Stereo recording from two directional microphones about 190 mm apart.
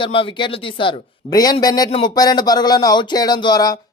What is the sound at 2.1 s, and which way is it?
Speech, 20° left (ahead or behind).